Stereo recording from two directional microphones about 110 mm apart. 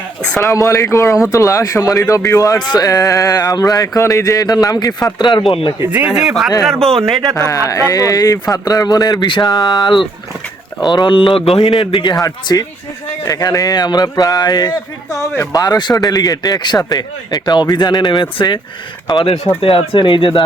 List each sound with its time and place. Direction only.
0.3 s speech: 20° left (ahead or behind)
0.5 s speech: 30° left (ahead or behind); by 5.7 s 55° left (ahead or behind)
5.8 s speech: 15° right (ahead or behind); by 7.2 s centre (ahead or behind)
7.3 s speech: 30° left (ahead or behind); by 12.1 s 50° left (ahead or behind)
12.1 s speech: 35° left (ahead or behind)
15.2 s speech: 25° left (ahead or behind); by 20.4 s 50° left (ahead or behind)